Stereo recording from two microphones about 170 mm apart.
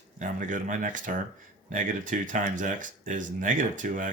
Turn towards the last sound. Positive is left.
turn(degrees=-50)  # may be behind; listen again after turning